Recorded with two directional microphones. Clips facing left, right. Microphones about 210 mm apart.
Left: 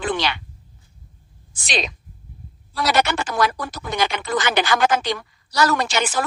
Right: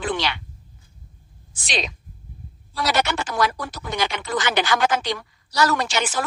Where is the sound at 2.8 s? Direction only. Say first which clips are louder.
Left 3 dB; 55° left (ahead or behind).